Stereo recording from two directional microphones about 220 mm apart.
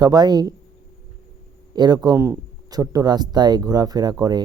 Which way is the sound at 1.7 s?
20° right (ahead or behind).